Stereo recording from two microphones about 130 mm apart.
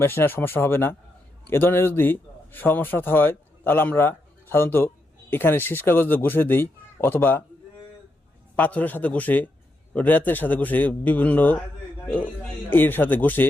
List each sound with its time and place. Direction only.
0.0 s a man's voice: 15° left (ahead or behind)
8.5 s speech: 15° left (ahead or behind)